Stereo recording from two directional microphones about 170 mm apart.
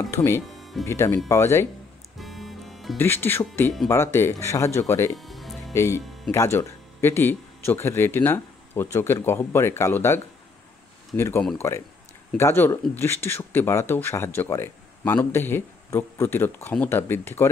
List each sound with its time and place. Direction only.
0.1 s speech: 15° left (ahead or behind)
2.1 s music: centre (ahead or behind)
3.0 s speech: 10° left (ahead or behind)
5.1 s music: centre (ahead or behind)
5.7 s speech: 15° left (ahead or behind)